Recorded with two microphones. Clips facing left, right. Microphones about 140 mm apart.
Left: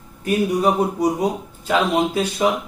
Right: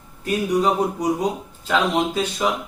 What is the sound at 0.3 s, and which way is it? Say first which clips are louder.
Speech: left 2 dB; 10° left (ahead or behind).